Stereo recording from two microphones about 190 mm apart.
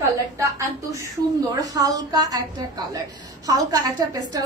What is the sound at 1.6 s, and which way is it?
Speech, 20° right (ahead or behind).